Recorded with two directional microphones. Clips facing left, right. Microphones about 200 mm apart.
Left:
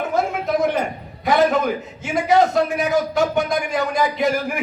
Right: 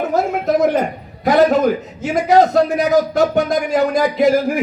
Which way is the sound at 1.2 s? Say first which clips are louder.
Right 5 dB; 40° right (ahead or behind).